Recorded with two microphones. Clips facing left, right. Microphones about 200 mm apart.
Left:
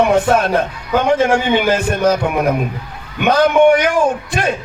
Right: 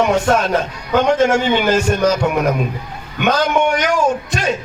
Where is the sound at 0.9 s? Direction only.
10° left (ahead or behind).